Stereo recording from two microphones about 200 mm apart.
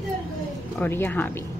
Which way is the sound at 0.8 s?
10° left (ahead or behind).